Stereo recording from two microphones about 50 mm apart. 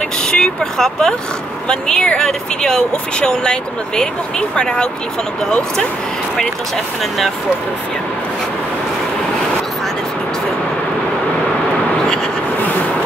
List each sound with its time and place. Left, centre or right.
0.2 s speech: centre